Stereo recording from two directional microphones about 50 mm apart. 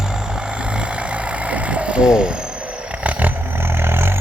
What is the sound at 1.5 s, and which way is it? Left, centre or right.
Vehicle, right.